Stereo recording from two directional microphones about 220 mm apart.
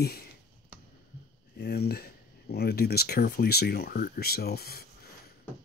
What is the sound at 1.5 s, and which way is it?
Speech, 45° left (ahead or behind).